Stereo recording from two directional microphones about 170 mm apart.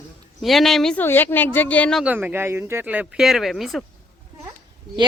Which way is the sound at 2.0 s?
10° right (ahead or behind).